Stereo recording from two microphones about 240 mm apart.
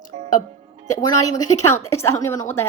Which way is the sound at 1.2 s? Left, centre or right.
Centre.